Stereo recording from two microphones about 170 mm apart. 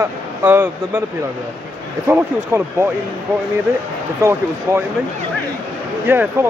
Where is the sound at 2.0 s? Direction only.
15° right (ahead or behind).